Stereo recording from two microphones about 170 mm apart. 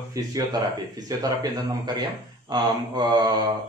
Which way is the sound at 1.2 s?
20° right (ahead or behind).